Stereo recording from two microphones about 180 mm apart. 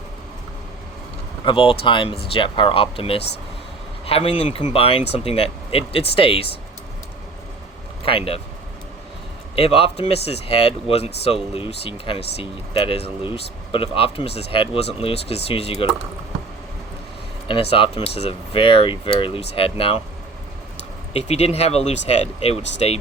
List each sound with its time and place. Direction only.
1.5 s speech: 30° left (ahead or behind)
8.0 s speech: 30° left (ahead or behind)
9.6 s speech: 30° left (ahead or behind)
17.5 s speech: 30° left (ahead or behind)
21.1 s speech: 35° left (ahead or behind)